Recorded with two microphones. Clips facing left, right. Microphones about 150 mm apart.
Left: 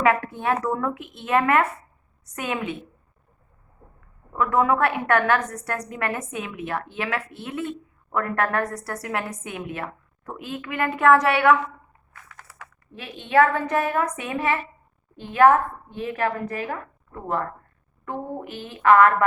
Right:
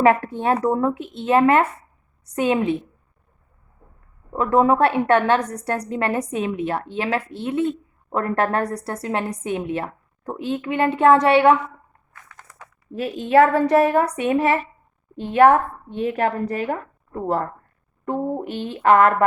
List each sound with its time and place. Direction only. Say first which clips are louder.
0.0 s a woman's voice: right 4 dB; 30° right (ahead or behind)
4.3 s a woman's voice: right 4 dB; 30° right (ahead or behind)
12.4 s a sound: even; 5° left (ahead or behind)
12.9 s a woman's voice: right 5 dB; 40° right (ahead or behind)